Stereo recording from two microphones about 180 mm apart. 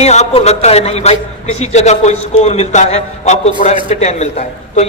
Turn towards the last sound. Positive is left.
turn(degrees=40)  # may be behind; listen again after turning